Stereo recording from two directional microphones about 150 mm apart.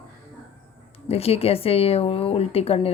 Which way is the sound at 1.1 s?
40° left (ahead or behind).